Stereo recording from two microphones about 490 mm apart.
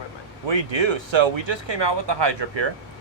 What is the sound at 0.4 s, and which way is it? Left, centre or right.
Speech, right.